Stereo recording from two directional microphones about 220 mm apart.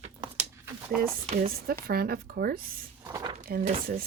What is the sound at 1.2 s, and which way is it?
Speech, 30° right (ahead or behind).